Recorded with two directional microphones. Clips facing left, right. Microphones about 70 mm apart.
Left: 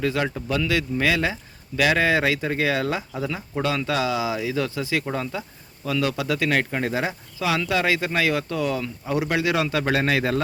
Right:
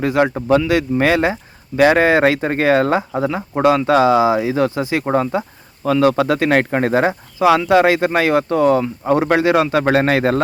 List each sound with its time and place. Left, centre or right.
0.0 s speech: right
0.3 s speech: right
0.6 s speech: right
7.3 s speech: right